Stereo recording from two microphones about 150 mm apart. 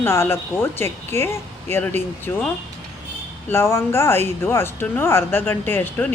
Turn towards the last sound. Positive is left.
turn(degrees=15)  # may be behind; listen again after turning